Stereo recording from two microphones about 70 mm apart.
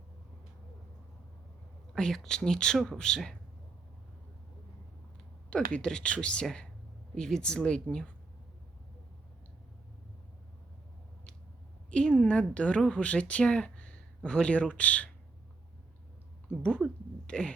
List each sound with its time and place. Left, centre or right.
2.0 s a woman's voice: centre
5.5 s a woman's voice: centre
11.9 s a woman's voice: centre
16.5 s a woman's voice: centre